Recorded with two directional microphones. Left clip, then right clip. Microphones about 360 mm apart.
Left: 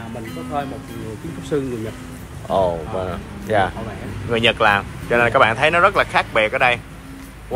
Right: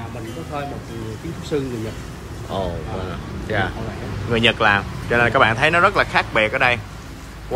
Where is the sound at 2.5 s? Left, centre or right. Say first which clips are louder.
Left 7 dB; centre.